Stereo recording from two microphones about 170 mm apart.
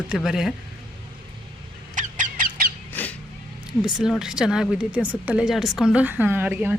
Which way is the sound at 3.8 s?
5° right (ahead or behind).